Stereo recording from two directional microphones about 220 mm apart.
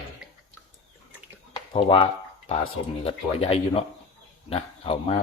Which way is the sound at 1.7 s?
25° left (ahead or behind).